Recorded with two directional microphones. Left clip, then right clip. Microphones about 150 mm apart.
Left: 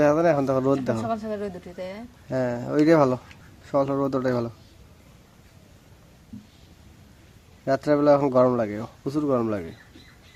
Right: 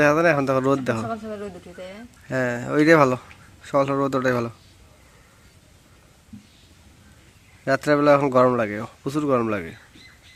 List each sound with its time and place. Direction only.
0.0 s speech: 5° right (ahead or behind)
1.3 s speech: 20° left (ahead or behind)
2.3 s speech: 5° right (ahead or behind)
7.6 s speech: 5° right (ahead or behind)